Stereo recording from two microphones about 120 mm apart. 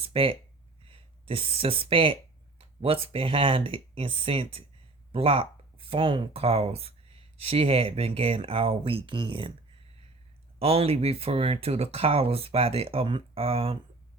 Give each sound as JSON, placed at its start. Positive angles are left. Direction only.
{"t": 0.0, "sound": "speech", "side_deg": -50}
{"t": 10.6, "sound": "speech", "side_deg": -55}